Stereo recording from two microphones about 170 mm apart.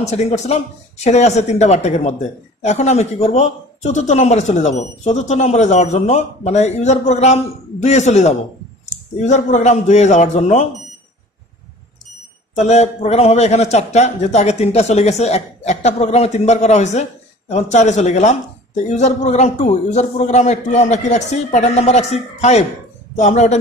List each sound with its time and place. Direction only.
0.0 s speech: 40° left (ahead or behind)
12.5 s speech: 40° left (ahead or behind)